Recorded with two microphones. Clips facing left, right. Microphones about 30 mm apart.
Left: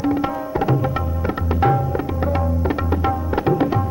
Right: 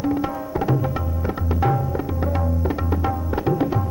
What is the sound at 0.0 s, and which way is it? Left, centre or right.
Tabla, left.